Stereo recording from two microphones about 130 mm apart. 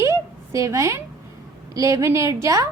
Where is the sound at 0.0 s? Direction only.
20° right (ahead or behind).